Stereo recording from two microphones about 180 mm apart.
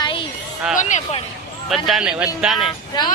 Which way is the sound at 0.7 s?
40° left (ahead or behind).